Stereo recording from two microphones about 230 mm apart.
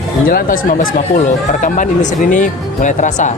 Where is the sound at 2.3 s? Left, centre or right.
Left.